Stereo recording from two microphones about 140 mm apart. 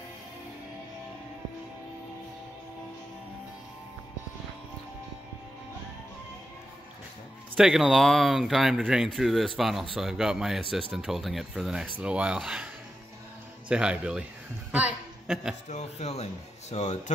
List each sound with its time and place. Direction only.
7.5 s speech: centre (ahead or behind)
13.7 s speech: 10° right (ahead or behind)
14.7 s a sound: 10° right (ahead or behind)
15.7 s speech: 50° left (ahead or behind)